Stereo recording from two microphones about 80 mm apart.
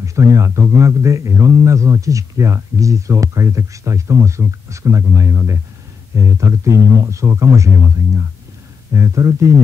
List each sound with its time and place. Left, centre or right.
0.0 s a man's voice: right
8.9 s a man's voice: right